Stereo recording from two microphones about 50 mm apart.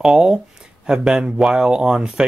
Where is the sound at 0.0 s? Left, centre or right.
Centre.